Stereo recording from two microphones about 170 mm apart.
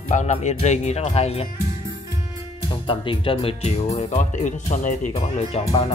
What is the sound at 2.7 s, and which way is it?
Speech, 30° left (ahead or behind).